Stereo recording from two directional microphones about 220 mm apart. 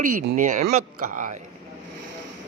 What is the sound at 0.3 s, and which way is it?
Speech, 35° right (ahead or behind).